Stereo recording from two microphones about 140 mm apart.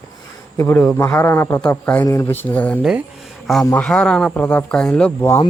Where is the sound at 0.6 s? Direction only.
15° left (ahead or behind).